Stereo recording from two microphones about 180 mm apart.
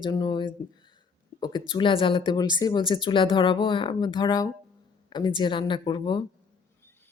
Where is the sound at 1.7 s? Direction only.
30° left (ahead or behind).